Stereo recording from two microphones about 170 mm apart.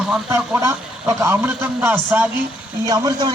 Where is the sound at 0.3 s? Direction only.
15° right (ahead or behind).